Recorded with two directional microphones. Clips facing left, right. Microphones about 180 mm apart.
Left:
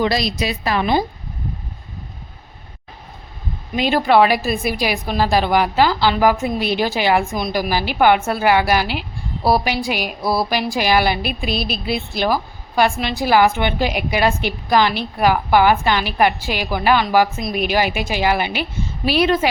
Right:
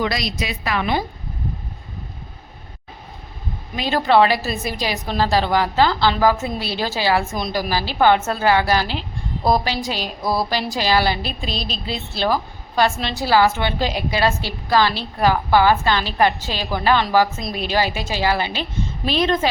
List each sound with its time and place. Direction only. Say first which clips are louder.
0.0 s a woman's voice: left 4 dB; 30° left (ahead or behind)
3.8 s a woman's voice: left 2 dB; 15° left (ahead or behind)